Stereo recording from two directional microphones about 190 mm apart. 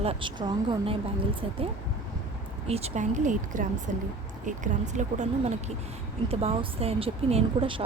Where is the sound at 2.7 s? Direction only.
35° right (ahead or behind).